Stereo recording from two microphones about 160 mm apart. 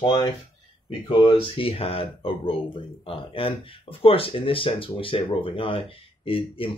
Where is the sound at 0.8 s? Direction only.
30° left (ahead or behind).